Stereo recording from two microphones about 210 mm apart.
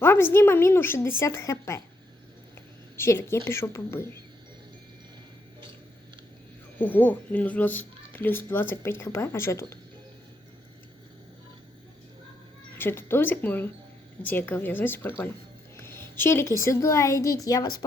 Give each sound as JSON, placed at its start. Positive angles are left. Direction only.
{"t": 0.0, "sound": "speech", "side_deg": 10}
{"t": 2.9, "sound": "speech", "side_deg": 15}
{"t": 6.7, "sound": "speech", "side_deg": 10}
{"t": 12.7, "sound": "a woman's voice", "side_deg": 10}